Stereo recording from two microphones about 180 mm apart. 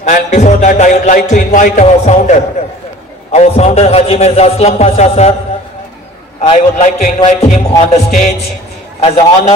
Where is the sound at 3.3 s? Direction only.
35° left (ahead or behind).